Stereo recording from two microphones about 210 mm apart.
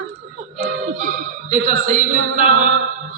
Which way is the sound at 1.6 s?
35° right (ahead or behind).